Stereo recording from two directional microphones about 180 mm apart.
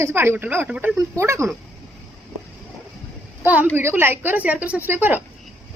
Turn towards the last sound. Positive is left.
turn(degrees=-10)  # may be behind; listen again after turning